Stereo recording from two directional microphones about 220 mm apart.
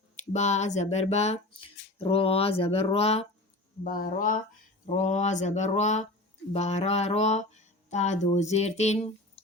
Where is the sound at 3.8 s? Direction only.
40° left (ahead or behind).